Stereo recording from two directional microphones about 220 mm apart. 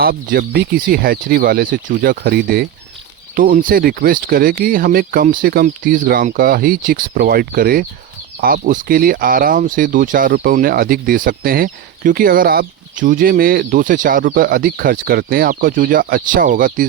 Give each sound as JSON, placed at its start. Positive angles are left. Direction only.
{"t": 0.0, "sound": "speech", "side_deg": -45}